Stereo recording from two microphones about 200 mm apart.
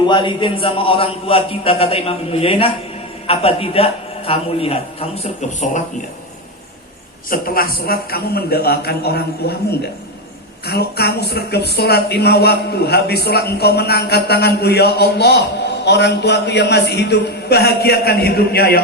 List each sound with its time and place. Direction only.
0.0 s a man's voice: 25° left (ahead or behind)
7.3 s speech: 45° left (ahead or behind)
10.7 s speech: 55° left (ahead or behind)